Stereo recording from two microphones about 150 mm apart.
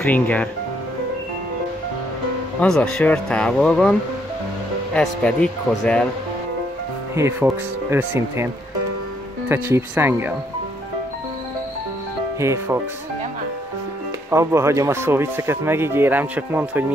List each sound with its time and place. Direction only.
0.0 s a man's voice: 10° left (ahead or behind)
2.6 s speech: 5° left (ahead or behind)
4.9 s a man's voice: 5° left (ahead or behind)
7.2 s speech: 15° right (ahead or behind)
9.5 s speech: 15° right (ahead or behind)
12.4 s speech: 20° right (ahead or behind)
14.3 s speech: 20° right (ahead or behind)